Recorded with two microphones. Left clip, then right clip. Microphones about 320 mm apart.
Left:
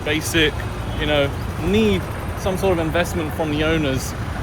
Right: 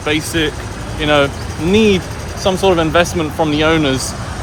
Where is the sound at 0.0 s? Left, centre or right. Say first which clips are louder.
Right 2 dB; centre.